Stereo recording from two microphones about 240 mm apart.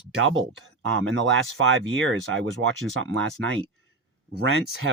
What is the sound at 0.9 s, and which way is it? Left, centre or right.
Speech, right.